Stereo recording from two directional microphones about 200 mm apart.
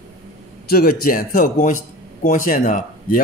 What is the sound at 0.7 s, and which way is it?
A man's voice, 50° left (ahead or behind).